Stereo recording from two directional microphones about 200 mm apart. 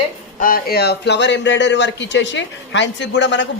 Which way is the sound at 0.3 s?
45° left (ahead or behind).